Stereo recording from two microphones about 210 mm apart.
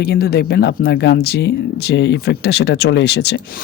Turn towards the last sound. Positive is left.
turn(degrees=50)  # may be behind; listen again after turning